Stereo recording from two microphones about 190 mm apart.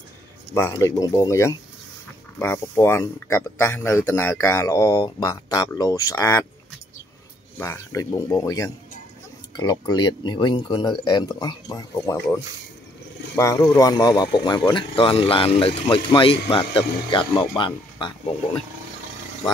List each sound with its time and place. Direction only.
0.5 s speech: 15° left (ahead or behind)
7.5 s speech: 15° left (ahead or behind)
13.4 s speech: 15° left (ahead or behind)